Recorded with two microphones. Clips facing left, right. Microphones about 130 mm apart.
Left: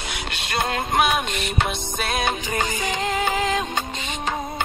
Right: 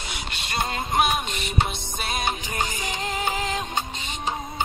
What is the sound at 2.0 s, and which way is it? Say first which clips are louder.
Music: left 3 dB; 90° left.